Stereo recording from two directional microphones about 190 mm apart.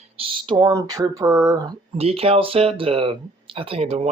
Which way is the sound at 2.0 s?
30° right (ahead or behind).